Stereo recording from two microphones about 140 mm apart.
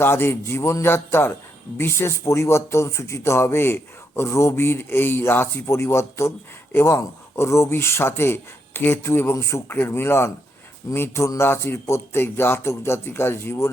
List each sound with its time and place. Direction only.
0.0 s speech: 15° left (ahead or behind)